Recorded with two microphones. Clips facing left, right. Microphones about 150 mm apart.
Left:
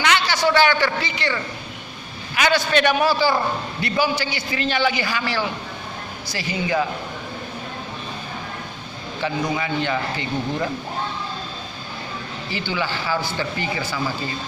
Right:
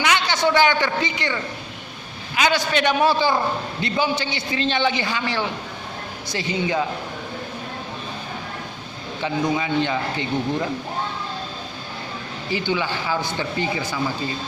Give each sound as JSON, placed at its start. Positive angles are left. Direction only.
{"t": 0.0, "sound": "a man's voice", "side_deg": -20}
{"t": 9.2, "sound": "a man's voice", "side_deg": -20}
{"t": 12.5, "sound": "a man's voice", "side_deg": -15}